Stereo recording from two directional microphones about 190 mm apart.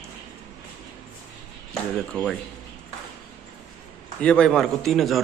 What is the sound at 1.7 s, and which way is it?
Speech, 5° left (ahead or behind).